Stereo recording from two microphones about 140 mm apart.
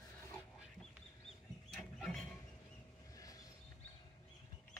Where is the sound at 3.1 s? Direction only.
25° left (ahead or behind).